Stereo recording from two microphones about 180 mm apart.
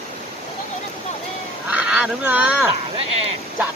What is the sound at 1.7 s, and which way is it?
A child's voice, 5° right (ahead or behind).